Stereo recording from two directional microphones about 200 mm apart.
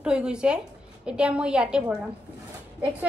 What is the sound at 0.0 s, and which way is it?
A woman's voice, 5° right (ahead or behind).